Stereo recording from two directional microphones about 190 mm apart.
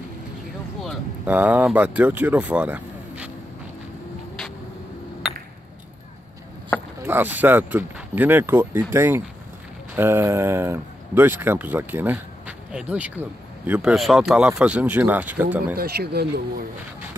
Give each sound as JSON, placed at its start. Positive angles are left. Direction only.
{"t": 0.8, "sound": "speech", "side_deg": -10}
{"t": 7.1, "sound": "speech", "side_deg": -10}
{"t": 15.7, "sound": "speech", "side_deg": -55}